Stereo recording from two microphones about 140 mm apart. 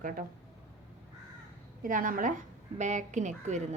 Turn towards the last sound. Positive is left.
turn(degrees=-60)  # may be behind; listen again after turning